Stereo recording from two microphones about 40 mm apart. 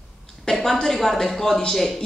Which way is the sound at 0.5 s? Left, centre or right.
Centre.